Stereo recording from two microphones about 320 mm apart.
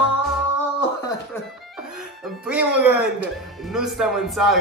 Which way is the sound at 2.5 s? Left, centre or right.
Centre.